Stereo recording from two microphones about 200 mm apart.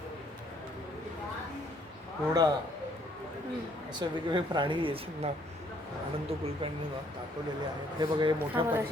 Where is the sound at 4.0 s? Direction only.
25° right (ahead or behind).